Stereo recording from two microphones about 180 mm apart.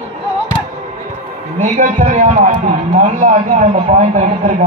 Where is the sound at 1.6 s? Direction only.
45° right (ahead or behind).